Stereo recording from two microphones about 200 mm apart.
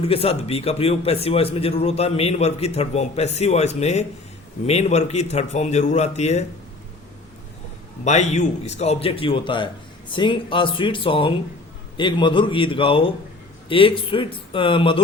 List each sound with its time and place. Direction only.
0.1 s a man's voice: 30° left (ahead or behind)
8.0 s a man's voice: 35° left (ahead or behind)